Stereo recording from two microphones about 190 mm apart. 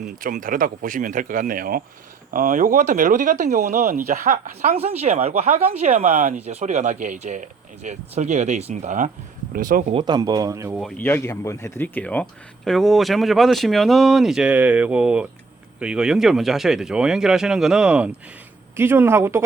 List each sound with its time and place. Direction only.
0.2 s speech: 45° right (ahead or behind)
9.9 s speech: 25° right (ahead or behind)
10.8 s speech: 5° left (ahead or behind); by 19.4 s 15° right (ahead or behind)